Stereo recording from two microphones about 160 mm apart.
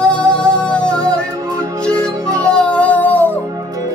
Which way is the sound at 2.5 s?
10° left (ahead or behind).